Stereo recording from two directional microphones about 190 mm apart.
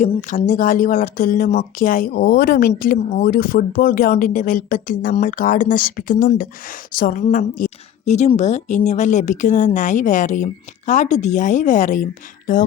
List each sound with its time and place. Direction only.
0.0 s speech: 40° left (ahead or behind)